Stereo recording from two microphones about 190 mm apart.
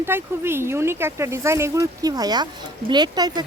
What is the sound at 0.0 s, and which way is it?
A woman's voice, 10° right (ahead or behind).